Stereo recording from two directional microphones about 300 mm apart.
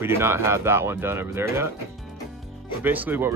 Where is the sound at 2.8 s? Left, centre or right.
Centre.